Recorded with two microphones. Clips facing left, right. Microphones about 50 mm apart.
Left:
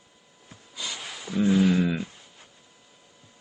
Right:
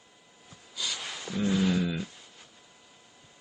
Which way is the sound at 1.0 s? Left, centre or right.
Centre.